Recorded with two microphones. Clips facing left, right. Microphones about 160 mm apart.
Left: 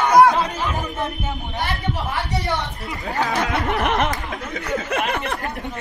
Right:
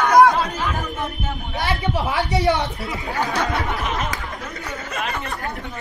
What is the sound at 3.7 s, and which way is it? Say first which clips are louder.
Speech: left 5 dB; 70° left (ahead or behind).